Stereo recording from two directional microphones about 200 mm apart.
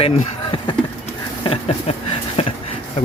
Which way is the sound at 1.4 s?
30° left (ahead or behind).